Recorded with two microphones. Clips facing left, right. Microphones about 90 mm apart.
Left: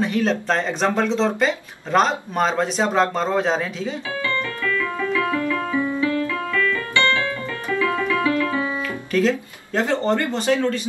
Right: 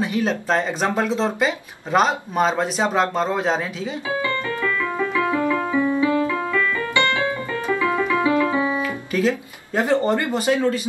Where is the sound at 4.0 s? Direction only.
20° right (ahead or behind).